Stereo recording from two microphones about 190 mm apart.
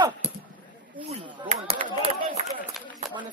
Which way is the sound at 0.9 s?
25° right (ahead or behind).